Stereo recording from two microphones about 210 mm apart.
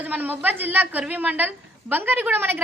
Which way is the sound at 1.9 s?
10° right (ahead or behind).